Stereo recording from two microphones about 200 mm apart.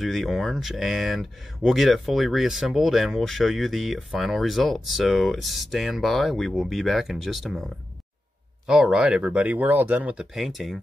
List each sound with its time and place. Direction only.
0.0 s speech: centre (ahead or behind)
8.6 s speech: 5° right (ahead or behind)